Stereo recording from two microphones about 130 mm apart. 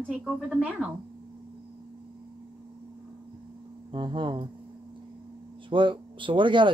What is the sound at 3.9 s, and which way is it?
Speech, 40° right (ahead or behind).